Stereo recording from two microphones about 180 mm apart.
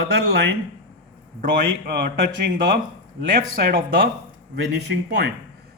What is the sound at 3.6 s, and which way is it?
Speech, 60° right (ahead or behind).